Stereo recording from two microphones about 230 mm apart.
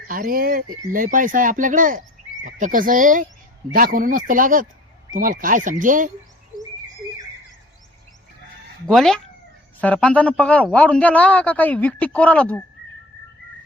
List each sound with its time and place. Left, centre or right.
0.1 s speech: right
8.9 s a man's voice: centre